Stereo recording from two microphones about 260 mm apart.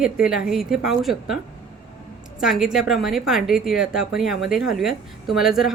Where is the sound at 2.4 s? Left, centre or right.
Centre.